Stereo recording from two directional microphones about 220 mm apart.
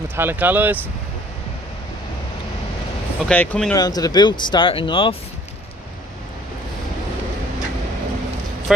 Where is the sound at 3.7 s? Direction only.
15° left (ahead or behind).